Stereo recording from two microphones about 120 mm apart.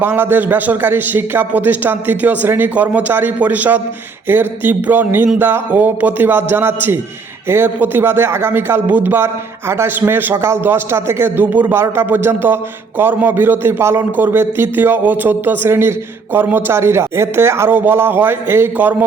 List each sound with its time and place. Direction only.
0.0 s a man's voice: 15° right (ahead or behind)